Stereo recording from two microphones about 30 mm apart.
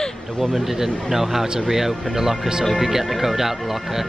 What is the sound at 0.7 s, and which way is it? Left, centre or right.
Speech, centre.